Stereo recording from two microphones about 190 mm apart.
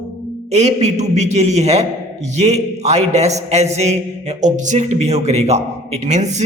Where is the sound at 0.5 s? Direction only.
35° right (ahead or behind).